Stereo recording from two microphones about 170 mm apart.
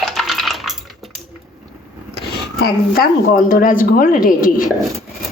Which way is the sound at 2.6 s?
60° left (ahead or behind).